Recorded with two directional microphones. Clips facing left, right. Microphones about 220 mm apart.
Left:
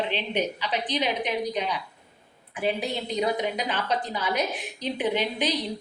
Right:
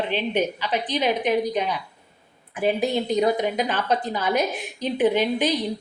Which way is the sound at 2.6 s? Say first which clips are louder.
Right 6 dB; 45° right (ahead or behind).